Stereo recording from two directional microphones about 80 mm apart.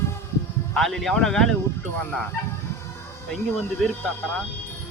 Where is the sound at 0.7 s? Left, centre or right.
Centre.